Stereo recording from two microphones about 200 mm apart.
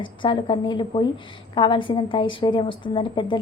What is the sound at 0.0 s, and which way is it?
A woman's voice, 25° left (ahead or behind).